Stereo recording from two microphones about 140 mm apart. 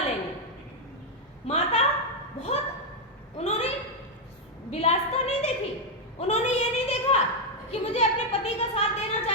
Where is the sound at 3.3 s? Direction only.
50° left (ahead or behind).